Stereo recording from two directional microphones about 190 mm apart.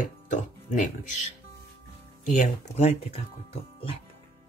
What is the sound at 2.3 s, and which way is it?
Speech, 35° left (ahead or behind).